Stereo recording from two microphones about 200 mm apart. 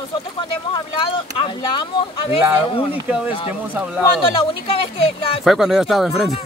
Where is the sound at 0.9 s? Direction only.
25° left (ahead or behind).